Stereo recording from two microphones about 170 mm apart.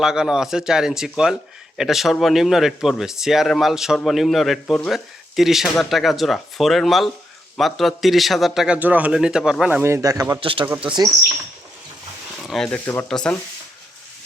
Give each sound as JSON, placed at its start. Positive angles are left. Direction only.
{"t": 0.0, "sound": "speech", "side_deg": -5}
{"t": 9.8, "sound": "a man's voice", "side_deg": -20}
{"t": 10.4, "sound": "speech", "side_deg": -30}
{"t": 12.4, "sound": "speech", "side_deg": 0}